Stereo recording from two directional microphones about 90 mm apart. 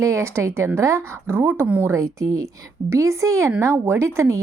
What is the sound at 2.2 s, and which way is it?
Speech, 35° right (ahead or behind).